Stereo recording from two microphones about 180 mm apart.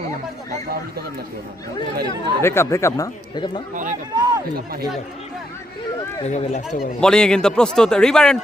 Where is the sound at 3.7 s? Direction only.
45° right (ahead or behind).